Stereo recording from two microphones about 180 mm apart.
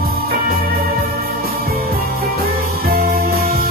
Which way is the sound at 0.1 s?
55° right (ahead or behind).